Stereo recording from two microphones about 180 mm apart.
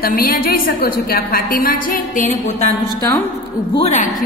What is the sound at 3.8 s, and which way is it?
Speech, 40° left (ahead or behind).